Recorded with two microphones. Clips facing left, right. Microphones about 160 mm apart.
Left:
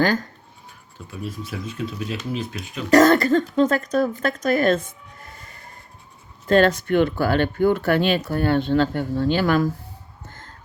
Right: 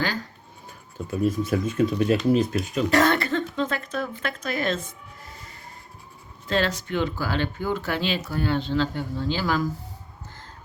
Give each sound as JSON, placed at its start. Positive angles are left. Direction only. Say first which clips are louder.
{"t": 0.0, "sound": "speech", "louder": "left 8 dB", "side_deg": 45}
{"t": 1.1, "sound": "speech", "louder": "right 9 dB", "side_deg": -45}
{"t": 2.9, "sound": "speech", "louder": "left 8 dB", "side_deg": 40}
{"t": 6.5, "sound": "speech", "louder": "left 8 dB", "side_deg": 55}